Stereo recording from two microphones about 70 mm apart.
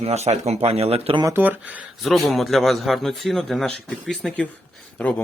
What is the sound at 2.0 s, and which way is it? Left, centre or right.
Speech, centre.